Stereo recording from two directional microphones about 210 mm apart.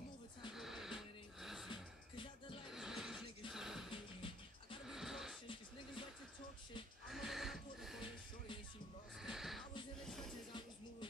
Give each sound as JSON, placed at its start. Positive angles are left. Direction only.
{"t": 0.5, "sound": "music", "side_deg": 0}
{"t": 1.7, "sound": "music", "side_deg": 25}
{"t": 2.7, "sound": "neigh", "side_deg": 0}
{"t": 3.9, "sound": "music", "side_deg": 25}
{"t": 4.8, "sound": "a sound", "side_deg": 0}
{"t": 7.1, "sound": "music", "side_deg": 0}
{"t": 9.2, "sound": "a sound", "side_deg": 0}